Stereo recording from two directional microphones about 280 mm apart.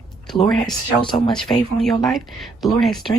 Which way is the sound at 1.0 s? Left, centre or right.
Centre.